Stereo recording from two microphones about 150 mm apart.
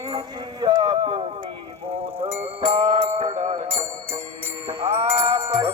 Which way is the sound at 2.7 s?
40° right (ahead or behind).